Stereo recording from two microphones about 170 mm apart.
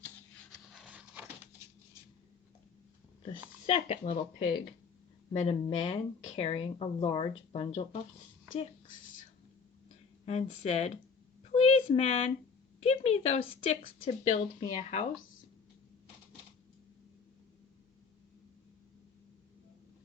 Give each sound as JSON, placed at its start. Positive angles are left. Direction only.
{"t": 0.9, "sound": "a sound", "side_deg": -10}
{"t": 3.7, "sound": "speech", "side_deg": 45}
{"t": 5.3, "sound": "a woman's voice", "side_deg": 40}
{"t": 10.2, "sound": "a woman's voice", "side_deg": 40}